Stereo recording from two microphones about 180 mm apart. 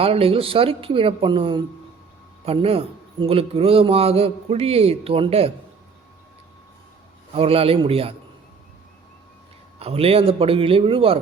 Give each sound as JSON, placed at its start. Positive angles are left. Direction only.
{"t": 0.0, "sound": "speech", "side_deg": -30}
{"t": 7.3, "sound": "speech", "side_deg": -30}
{"t": 9.7, "sound": "speech", "side_deg": -35}